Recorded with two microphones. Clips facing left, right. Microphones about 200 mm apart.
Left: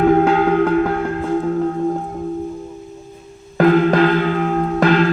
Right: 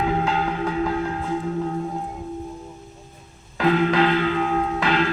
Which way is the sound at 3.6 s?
50° left (ahead or behind).